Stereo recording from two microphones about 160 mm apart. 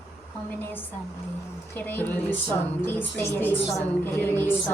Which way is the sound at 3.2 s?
15° left (ahead or behind).